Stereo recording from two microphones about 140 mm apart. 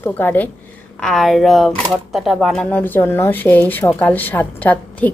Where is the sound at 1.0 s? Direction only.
5° left (ahead or behind).